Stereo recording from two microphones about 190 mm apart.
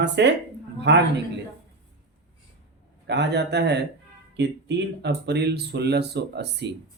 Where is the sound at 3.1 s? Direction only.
65° right (ahead or behind).